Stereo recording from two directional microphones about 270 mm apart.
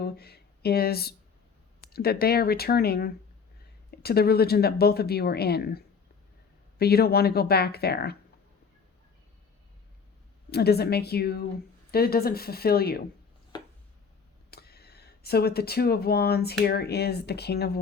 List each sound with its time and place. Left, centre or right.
0.0 s speech: left
10.5 s speech: left
14.5 s speech: left